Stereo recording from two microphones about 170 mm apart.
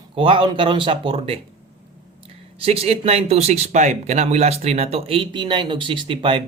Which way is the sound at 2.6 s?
35° right (ahead or behind).